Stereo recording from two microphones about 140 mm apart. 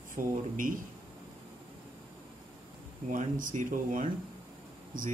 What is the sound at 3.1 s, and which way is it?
Speech, 70° right (ahead or behind).